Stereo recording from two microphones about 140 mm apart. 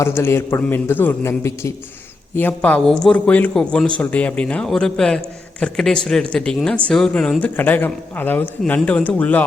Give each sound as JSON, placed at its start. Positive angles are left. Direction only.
{"t": 0.0, "sound": "a man's voice", "side_deg": 20}